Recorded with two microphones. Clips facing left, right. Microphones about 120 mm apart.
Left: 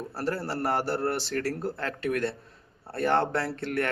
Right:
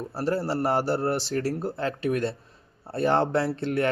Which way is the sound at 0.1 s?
15° right (ahead or behind).